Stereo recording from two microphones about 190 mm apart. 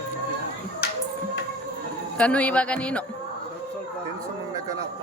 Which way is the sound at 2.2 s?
5° left (ahead or behind).